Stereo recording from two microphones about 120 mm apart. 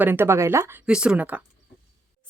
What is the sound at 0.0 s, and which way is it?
Speech, 20° right (ahead or behind).